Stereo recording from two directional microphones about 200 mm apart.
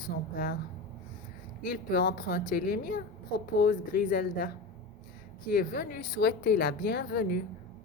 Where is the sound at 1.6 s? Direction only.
50° left (ahead or behind).